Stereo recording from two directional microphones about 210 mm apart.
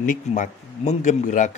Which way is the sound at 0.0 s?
35° left (ahead or behind).